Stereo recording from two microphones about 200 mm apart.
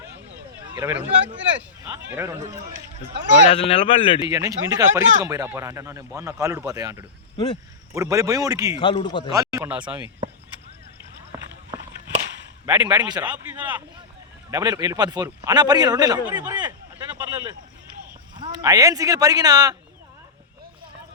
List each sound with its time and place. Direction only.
0.8 s speech: 15° right (ahead or behind)
3.5 s speech: 30° left (ahead or behind)
4.3 s speech: 15° right (ahead or behind)
7.3 s speech: 20° left (ahead or behind)
7.9 s speech: 15° right (ahead or behind)
8.8 s speech: 25° left (ahead or behind)
9.3 s speech: 15° right (ahead or behind)
12.6 s a man's voice: 5° right (ahead or behind)
12.9 s a man's voice: 20° right (ahead or behind)
13.2 s speech: 10° right (ahead or behind)
14.5 s a man's voice: 20° right (ahead or behind)